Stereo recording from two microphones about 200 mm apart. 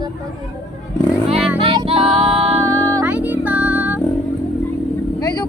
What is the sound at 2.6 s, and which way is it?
Music, 15° right (ahead or behind).